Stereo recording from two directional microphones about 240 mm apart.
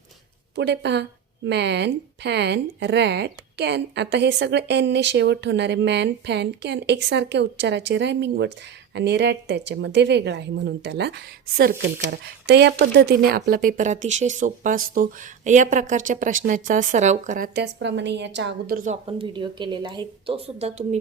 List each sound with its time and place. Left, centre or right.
0.5 s speech: right
18.8 s speech: right